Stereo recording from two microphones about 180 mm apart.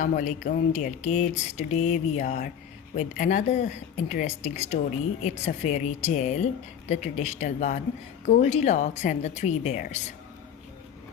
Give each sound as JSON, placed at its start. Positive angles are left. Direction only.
{"t": 0.0, "sound": "a woman's voice", "side_deg": 45}